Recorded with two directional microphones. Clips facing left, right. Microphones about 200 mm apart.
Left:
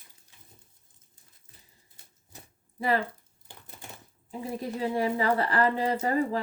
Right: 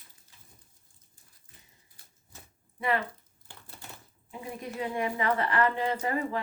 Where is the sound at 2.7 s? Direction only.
35° left (ahead or behind).